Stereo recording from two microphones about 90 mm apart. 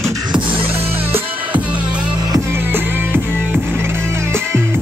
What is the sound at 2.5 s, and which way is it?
Music, 25° right (ahead or behind).